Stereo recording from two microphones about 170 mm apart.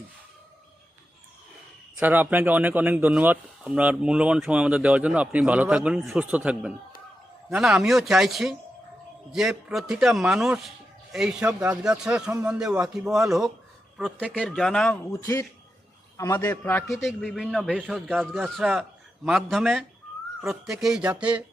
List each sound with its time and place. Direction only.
2.0 s speech: 10° right (ahead or behind)
15.1 s a man's voice: 15° left (ahead or behind)
16.8 s a man's voice: centre (ahead or behind)